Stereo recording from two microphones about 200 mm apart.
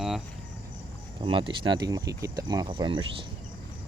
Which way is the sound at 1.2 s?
25° right (ahead or behind).